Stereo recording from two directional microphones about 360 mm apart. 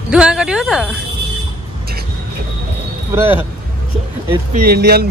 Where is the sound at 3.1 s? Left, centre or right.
Centre.